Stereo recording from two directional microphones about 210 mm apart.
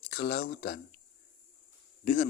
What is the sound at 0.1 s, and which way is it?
Speech, 45° left (ahead or behind).